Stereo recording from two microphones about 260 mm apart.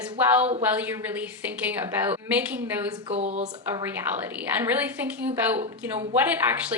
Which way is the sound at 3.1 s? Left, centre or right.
Right.